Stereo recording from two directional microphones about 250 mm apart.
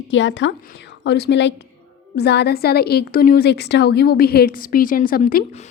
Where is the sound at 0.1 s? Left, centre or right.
Left.